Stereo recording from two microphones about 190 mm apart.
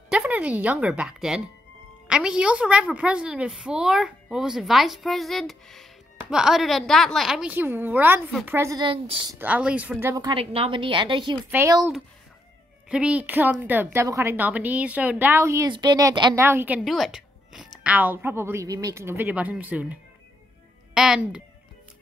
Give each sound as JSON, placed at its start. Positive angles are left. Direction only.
{"t": 0.1, "sound": "a woman's voice", "side_deg": -5}
{"t": 9.4, "sound": "a woman's voice", "side_deg": -5}
{"t": 10.3, "sound": "a woman's voice", "side_deg": -30}
{"t": 12.9, "sound": "a woman's voice", "side_deg": -5}